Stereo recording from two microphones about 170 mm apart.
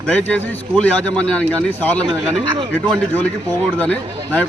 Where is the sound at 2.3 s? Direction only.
30° right (ahead or behind).